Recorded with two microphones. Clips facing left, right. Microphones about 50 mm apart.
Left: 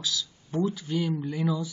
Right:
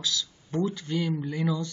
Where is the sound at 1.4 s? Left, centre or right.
Centre.